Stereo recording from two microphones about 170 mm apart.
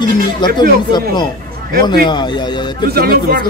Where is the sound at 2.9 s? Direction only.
65° right (ahead or behind).